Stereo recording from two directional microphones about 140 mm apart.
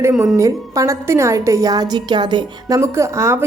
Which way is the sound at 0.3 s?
25° right (ahead or behind).